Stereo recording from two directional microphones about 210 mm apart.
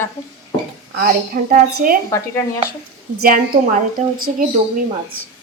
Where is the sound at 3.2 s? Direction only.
40° right (ahead or behind).